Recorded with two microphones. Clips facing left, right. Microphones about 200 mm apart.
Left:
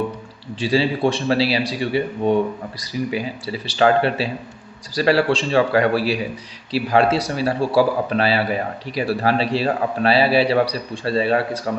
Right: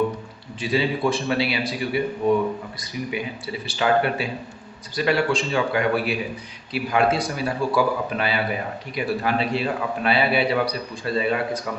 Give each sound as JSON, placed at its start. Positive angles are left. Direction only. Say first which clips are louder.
{"t": 0.6, "sound": "a man's voice", "louder": "left 4 dB", "side_deg": 30}